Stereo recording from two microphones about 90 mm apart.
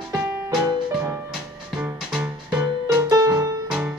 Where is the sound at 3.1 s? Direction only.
40° right (ahead or behind).